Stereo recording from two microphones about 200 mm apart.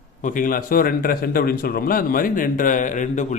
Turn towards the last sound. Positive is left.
turn(degrees=40)  # may be behind; listen again after turning